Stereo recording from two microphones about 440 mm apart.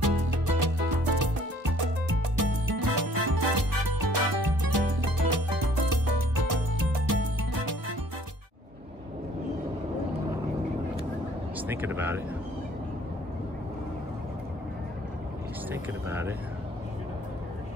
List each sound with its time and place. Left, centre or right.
0.0 s music: right
2.3 s music: right
11.5 s speech: centre
15.7 s speech: centre